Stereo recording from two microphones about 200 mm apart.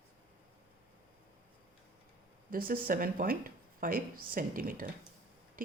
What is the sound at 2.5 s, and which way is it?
Speech, 45° right (ahead or behind).